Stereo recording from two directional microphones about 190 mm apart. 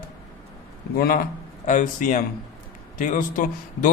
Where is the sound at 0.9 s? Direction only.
50° left (ahead or behind).